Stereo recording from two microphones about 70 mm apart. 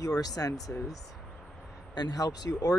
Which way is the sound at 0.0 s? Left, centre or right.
Left.